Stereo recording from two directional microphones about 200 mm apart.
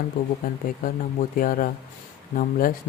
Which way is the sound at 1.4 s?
45° left (ahead or behind).